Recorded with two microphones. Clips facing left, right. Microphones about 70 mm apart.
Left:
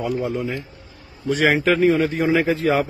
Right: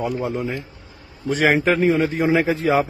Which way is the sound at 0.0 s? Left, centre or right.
Right.